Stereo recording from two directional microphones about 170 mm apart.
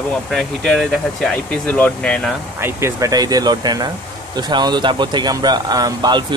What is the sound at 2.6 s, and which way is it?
Speech, 15° right (ahead or behind).